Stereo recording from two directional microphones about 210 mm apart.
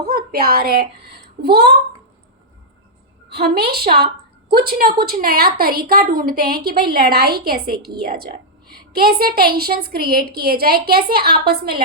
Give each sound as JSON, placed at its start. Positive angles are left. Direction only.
{"t": 0.0, "sound": "speech", "side_deg": -45}
{"t": 3.2, "sound": "a woman's voice", "side_deg": -50}